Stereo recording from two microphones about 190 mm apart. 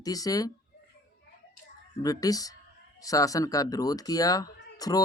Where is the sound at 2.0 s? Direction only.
20° left (ahead or behind).